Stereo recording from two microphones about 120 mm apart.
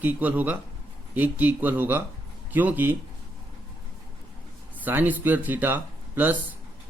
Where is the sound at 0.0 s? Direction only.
15° right (ahead or behind).